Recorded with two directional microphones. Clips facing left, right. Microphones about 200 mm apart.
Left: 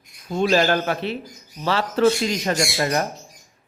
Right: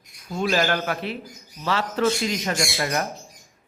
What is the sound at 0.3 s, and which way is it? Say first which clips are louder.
A man's voice: left 4 dB; 30° left (ahead or behind).